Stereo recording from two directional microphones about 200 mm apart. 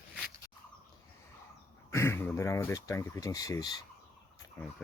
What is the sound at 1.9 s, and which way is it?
Speech, 10° left (ahead or behind).